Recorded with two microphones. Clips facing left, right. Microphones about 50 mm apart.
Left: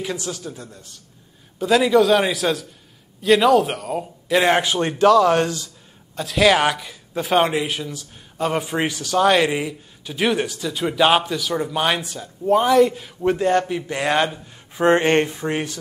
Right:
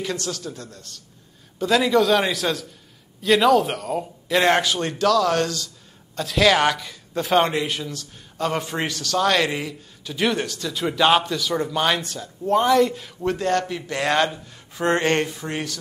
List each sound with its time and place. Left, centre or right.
0.0 s a man's voice: centre
4.6 s a man's voice: left
6.1 s speech: centre
13.3 s a man's voice: centre